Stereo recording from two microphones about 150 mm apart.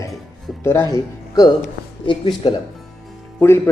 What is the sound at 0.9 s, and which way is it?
Speech, 25° left (ahead or behind).